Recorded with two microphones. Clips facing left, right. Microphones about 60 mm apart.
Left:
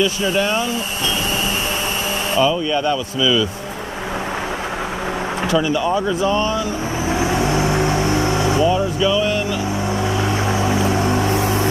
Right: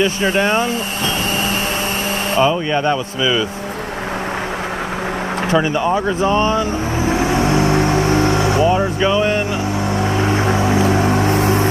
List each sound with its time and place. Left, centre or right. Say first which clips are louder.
0.0 s speech: right 2 dB; right
2.3 s speech: right 2 dB; right
5.5 s speech: right 2 dB; right
8.1 s vehicle: right 3 dB; right
8.5 s speech: right 2 dB; right
10.1 s vehicle: right 3 dB; right